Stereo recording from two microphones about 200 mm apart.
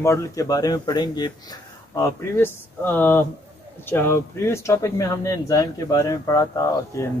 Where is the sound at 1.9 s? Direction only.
10° left (ahead or behind).